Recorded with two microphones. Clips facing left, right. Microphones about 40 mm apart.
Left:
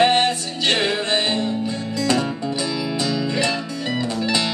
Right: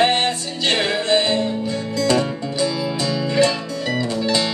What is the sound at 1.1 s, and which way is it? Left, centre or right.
Music, left.